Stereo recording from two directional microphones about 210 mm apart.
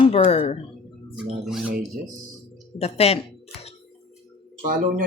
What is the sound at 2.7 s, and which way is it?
Speech, 30° left (ahead or behind).